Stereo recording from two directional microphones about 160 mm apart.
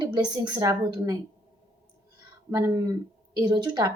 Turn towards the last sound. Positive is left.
turn(degrees=-25)  # may be behind; listen again after turning